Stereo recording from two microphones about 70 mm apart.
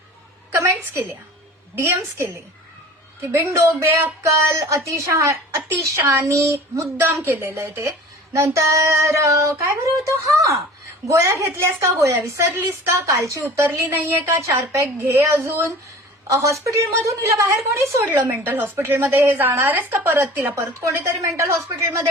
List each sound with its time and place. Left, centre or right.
0.5 s a sound: right
1.8 s a woman's voice: right
3.3 s speech: right
13.7 s a woman's voice: right
14.3 s a woman's voice: right
16.2 s speech: right
18.0 s a woman's voice: right
20.6 s speech: right